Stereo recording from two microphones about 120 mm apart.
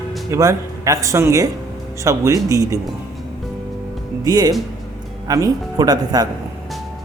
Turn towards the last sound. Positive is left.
turn(degrees=-30)  # may be behind; listen again after turning